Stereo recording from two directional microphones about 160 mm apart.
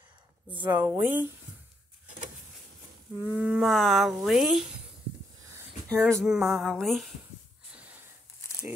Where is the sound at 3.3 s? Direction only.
5° right (ahead or behind).